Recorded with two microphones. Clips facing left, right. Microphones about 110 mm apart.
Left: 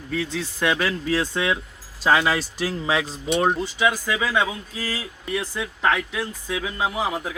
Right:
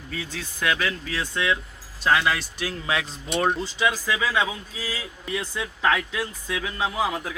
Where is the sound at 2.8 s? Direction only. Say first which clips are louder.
Left 3 dB; 25° left (ahead or behind).